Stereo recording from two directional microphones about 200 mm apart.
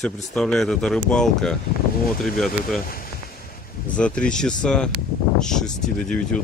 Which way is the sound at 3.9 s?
5° left (ahead or behind).